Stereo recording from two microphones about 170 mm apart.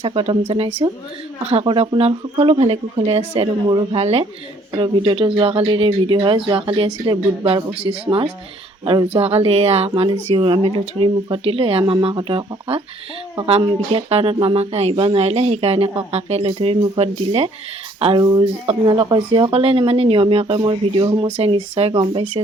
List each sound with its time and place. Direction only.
0.0 s speech: 30° right (ahead or behind)
18.2 s speech: 20° right (ahead or behind)
21.2 s speech: 35° right (ahead or behind)